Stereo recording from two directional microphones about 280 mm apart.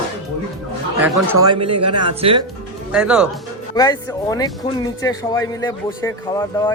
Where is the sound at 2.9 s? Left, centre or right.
Centre.